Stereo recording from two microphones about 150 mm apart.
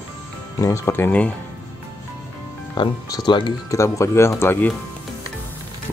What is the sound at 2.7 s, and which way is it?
Speech, 30° left (ahead or behind).